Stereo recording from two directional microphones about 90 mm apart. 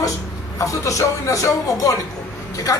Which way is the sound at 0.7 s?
40° left (ahead or behind).